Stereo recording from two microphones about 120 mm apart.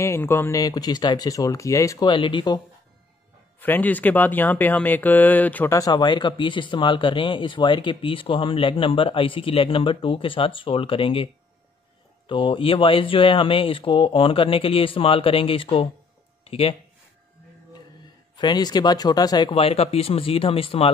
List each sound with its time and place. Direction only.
0.0 s speech: 20° left (ahead or behind)
2.0 s speech: 40° left (ahead or behind)
3.5 s speech: 15° left (ahead or behind)
5.8 s speech: 35° left (ahead or behind)
12.3 s speech: 45° left (ahead or behind)
18.3 s speech: 35° left (ahead or behind)
19.5 s speech: 55° left (ahead or behind)